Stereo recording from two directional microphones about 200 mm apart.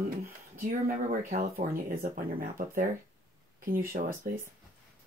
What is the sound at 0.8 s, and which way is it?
Speech, 40° right (ahead or behind).